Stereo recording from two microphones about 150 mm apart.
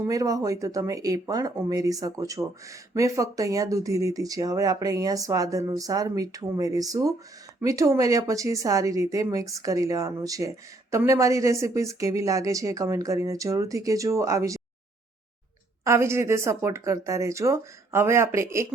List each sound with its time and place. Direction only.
0.1 s speech: 25° right (ahead or behind)
15.8 s speech: 20° right (ahead or behind)